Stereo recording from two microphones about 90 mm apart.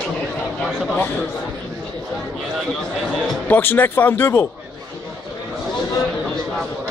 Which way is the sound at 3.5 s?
20° left (ahead or behind).